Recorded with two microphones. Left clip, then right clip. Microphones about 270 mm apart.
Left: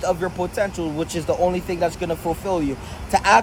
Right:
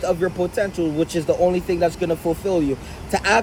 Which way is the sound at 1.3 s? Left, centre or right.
Left.